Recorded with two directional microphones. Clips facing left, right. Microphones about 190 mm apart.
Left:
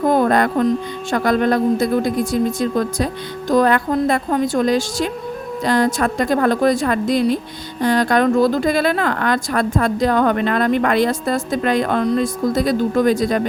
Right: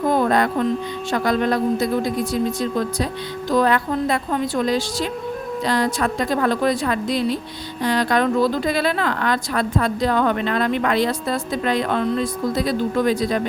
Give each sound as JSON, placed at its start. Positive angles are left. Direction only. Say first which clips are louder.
{"t": 0.1, "sound": "music", "louder": "left 2 dB", "side_deg": 50}
{"t": 1.1, "sound": "a woman's voice", "louder": "left 3 dB", "side_deg": 50}